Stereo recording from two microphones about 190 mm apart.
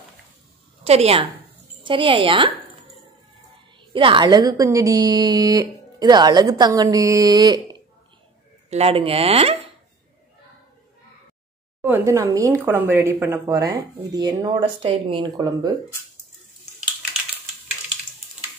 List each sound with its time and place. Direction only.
0.8 s a woman's voice: 35° right (ahead or behind)
3.9 s a woman's voice: 25° right (ahead or behind)
8.6 s speech: 35° right (ahead or behind)
11.8 s speech: 15° right (ahead or behind)